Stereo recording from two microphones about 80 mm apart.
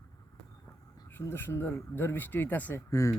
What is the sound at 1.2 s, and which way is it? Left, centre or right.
Speech, left.